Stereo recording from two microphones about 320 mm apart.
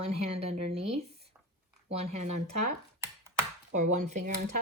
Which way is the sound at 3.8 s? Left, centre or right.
Right.